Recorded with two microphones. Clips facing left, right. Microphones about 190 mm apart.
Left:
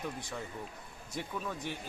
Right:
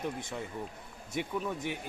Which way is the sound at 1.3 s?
20° right (ahead or behind).